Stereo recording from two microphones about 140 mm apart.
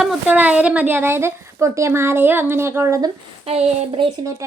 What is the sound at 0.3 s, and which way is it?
A woman's voice, 10° right (ahead or behind).